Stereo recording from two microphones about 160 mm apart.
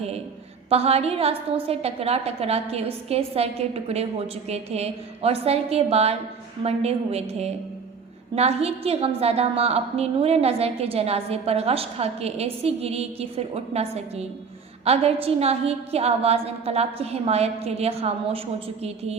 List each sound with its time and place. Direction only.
0.7 s a woman's voice: 40° right (ahead or behind)